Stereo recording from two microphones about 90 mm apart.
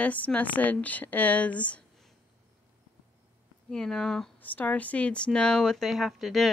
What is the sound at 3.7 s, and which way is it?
Speech, 5° left (ahead or behind).